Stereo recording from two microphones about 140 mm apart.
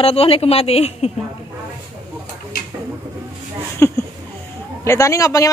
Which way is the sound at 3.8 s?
20° left (ahead or behind).